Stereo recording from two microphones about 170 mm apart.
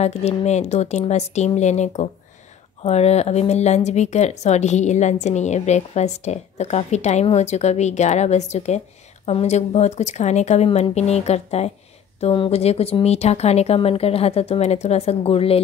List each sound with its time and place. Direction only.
0.0 s speech: 40° left (ahead or behind)